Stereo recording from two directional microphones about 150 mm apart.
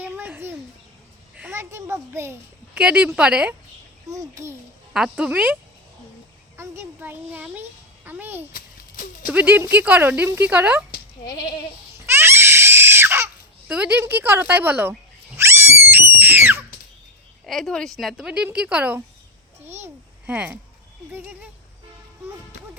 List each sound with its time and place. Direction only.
0.0 s a sound: 10° right (ahead or behind)
1.5 s speech: 20° right (ahead or behind)
2.7 s speech: 5° right (ahead or behind)
4.1 s a child's voice: 20° right (ahead or behind)
4.9 s speech: 5° right (ahead or behind)
6.6 s a child's voice: 15° right (ahead or behind)
8.5 s a sound: 65° left (ahead or behind)
9.2 s speech: 10° right (ahead or behind)
11.3 s goat: 25° left (ahead or behind)
12.0 s screaming: 15° right (ahead or behind)
13.7 s speech: 10° right (ahead or behind)
15.4 s a sound: 15° right (ahead or behind)
17.4 s a child's voice: centre (ahead or behind)